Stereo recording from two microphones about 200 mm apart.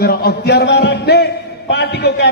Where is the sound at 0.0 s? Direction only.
50° left (ahead or behind).